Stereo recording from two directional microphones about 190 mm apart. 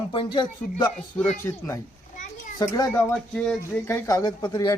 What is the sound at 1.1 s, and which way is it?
A man's voice, 15° left (ahead or behind).